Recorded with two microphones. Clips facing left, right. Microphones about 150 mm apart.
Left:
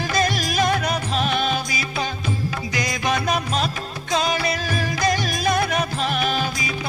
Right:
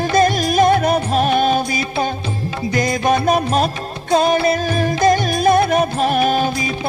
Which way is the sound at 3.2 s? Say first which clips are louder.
Right 7 dB; 45° right (ahead or behind).